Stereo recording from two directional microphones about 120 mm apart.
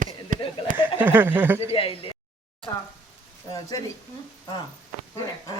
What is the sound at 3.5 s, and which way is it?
Speech, 35° left (ahead or behind).